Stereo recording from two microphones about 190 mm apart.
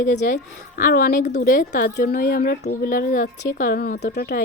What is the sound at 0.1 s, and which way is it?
A woman's voice, 40° left (ahead or behind).